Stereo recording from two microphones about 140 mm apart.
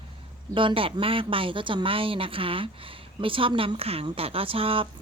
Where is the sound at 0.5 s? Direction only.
40° right (ahead or behind).